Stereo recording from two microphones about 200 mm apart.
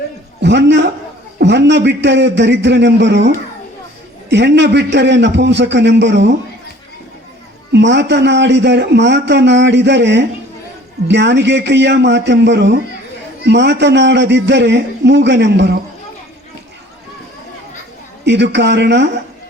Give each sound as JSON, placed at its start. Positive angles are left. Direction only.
{"t": 0.4, "sound": "a man's voice", "side_deg": -60}
{"t": 7.7, "sound": "a man's voice", "side_deg": -60}
{"t": 18.3, "sound": "a man's voice", "side_deg": -60}